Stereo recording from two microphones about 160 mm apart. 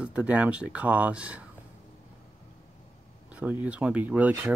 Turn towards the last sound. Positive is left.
turn(degrees=-10)  # may be behind; listen again after turning